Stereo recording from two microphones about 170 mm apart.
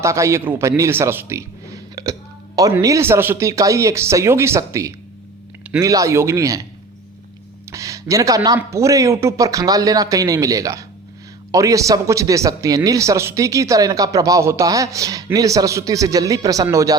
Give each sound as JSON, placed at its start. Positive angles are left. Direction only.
{"t": 0.0, "sound": "speech", "side_deg": -15}
{"t": 7.7, "sound": "a sound", "side_deg": -20}
{"t": 8.4, "sound": "speech", "side_deg": -15}